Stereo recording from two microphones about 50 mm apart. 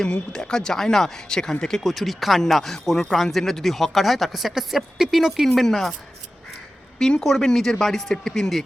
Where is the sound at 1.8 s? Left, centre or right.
Centre.